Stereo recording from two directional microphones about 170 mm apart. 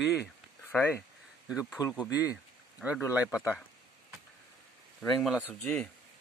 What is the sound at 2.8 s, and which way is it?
Speech, centre (ahead or behind).